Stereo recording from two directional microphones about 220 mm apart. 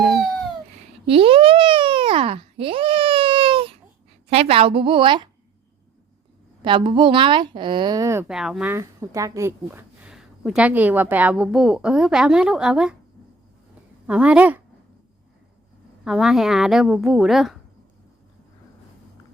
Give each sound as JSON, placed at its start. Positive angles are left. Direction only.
{"t": 1.0, "sound": "a sound", "side_deg": -25}
{"t": 4.3, "sound": "a woman's voice", "side_deg": -25}
{"t": 6.7, "sound": "speech", "side_deg": -20}
{"t": 14.1, "sound": "a woman's voice", "side_deg": -5}
{"t": 16.0, "sound": "a woman's voice", "side_deg": 0}